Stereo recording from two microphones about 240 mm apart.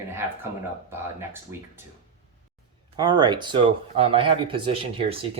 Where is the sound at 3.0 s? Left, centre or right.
Centre.